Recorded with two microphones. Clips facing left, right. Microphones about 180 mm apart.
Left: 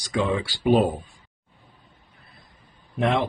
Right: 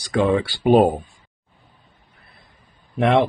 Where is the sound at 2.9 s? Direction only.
65° right (ahead or behind).